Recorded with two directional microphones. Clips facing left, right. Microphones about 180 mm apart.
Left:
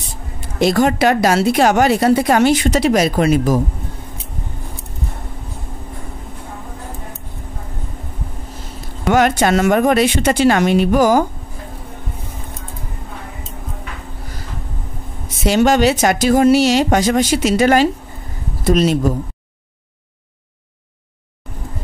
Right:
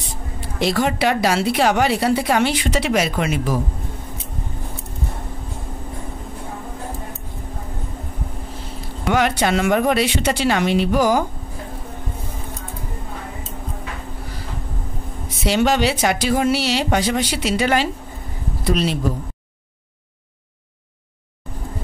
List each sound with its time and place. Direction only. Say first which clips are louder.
0.4 s a woman's voice: left 5 dB; 45° left (ahead or behind)
9.1 s a woman's voice: left 4 dB; 45° left (ahead or behind)
15.2 s a woman's voice: left 4 dB; 45° left (ahead or behind)